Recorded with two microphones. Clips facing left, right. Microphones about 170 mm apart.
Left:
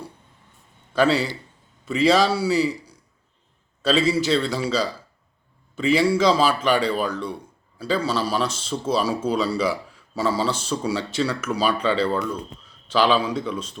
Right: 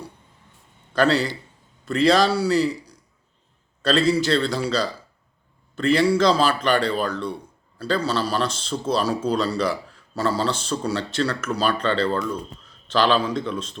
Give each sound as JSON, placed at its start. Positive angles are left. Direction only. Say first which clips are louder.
{"t": 0.9, "sound": "a man's voice", "louder": "even", "side_deg": 5}